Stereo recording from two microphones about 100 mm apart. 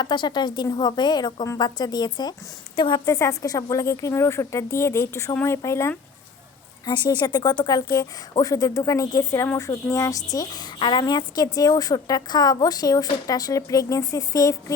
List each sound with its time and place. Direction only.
0.0 s a woman's voice: 50° left (ahead or behind)
3.1 s speech: 35° left (ahead or behind)
6.8 s a woman's voice: 45° left (ahead or behind)